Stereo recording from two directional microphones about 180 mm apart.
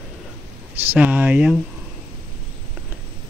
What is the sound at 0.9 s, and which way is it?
Speech, 10° right (ahead or behind).